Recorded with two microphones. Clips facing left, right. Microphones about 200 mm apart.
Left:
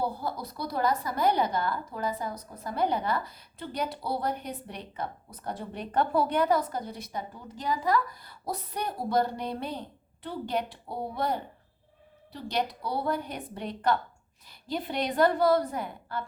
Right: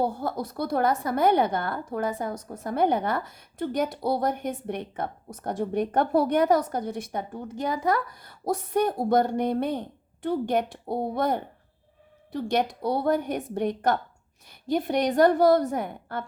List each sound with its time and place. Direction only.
0.0 s a woman's voice: 50° right (ahead or behind)